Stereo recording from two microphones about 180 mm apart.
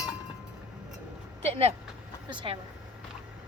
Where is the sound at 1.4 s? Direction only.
35° right (ahead or behind).